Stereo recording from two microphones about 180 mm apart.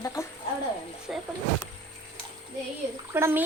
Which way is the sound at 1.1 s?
5° right (ahead or behind).